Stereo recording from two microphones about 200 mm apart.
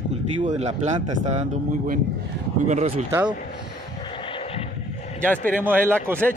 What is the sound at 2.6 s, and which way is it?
Speech, 35° right (ahead or behind).